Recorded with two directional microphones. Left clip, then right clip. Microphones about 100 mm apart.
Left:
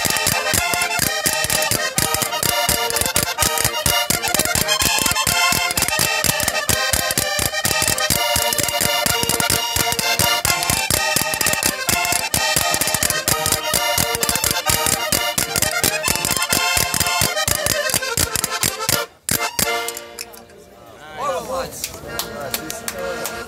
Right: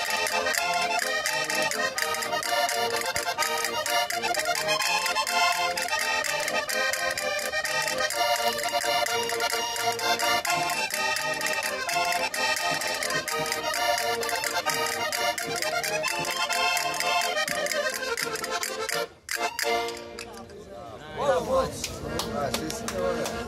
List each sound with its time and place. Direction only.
0.4 s music: 40° right (ahead or behind)